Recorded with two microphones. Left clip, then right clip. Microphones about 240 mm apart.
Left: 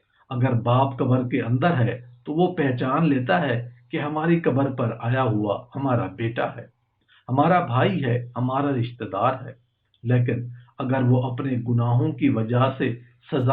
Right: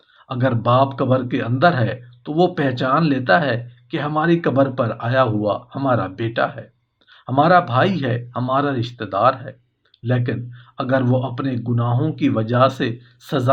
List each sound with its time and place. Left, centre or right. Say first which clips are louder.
0.3 s speech: right 6 dB; right